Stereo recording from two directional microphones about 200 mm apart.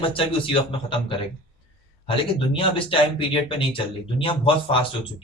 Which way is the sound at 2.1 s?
25° left (ahead or behind).